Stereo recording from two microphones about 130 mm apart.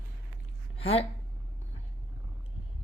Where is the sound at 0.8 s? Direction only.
50° left (ahead or behind).